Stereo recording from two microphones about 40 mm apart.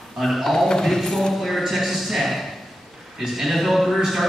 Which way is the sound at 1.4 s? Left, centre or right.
Centre.